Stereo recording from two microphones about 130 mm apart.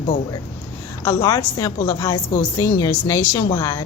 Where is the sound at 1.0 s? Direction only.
20° left (ahead or behind).